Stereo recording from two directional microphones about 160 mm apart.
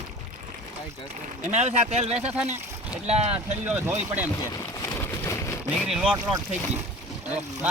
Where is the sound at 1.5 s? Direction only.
45° right (ahead or behind).